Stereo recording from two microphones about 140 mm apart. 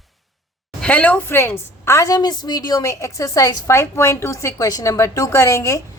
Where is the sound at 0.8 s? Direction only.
10° left (ahead or behind).